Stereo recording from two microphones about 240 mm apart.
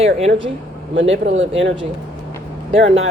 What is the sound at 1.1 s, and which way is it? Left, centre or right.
Speech, right.